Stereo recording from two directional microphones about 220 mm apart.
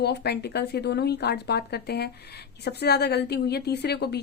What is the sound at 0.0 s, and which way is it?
A woman's voice, 45° left (ahead or behind).